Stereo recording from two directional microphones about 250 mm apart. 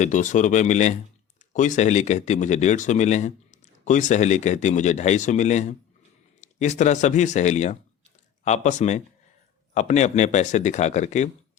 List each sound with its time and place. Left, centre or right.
0.0 s speech: left